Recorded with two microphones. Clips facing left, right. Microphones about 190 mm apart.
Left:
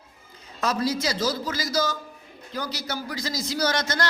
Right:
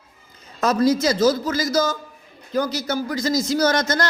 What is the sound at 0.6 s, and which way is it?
A man's voice, 45° right (ahead or behind).